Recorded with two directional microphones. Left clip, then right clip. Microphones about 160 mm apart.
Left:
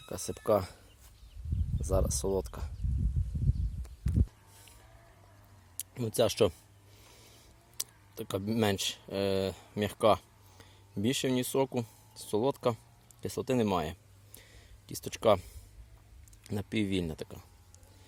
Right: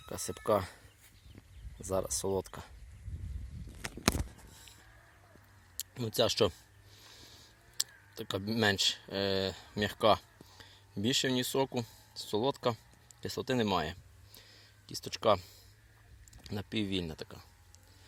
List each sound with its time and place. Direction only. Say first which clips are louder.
0.1 s speech: left 2 dB; 5° left (ahead or behind)
1.8 s speech: left 2 dB; 5° left (ahead or behind)
5.7 s speech: left 2 dB; 5° left (ahead or behind)
7.0 s a sound: right 3 dB; 10° left (ahead or behind)
7.8 s speech: right 2 dB; 10° left (ahead or behind)
14.3 s a sound: right 1 dB; 20° left (ahead or behind)
16.5 s speech: left 3 dB; 20° left (ahead or behind)